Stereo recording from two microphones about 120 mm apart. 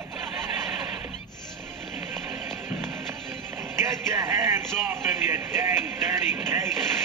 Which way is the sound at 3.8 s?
20° right (ahead or behind).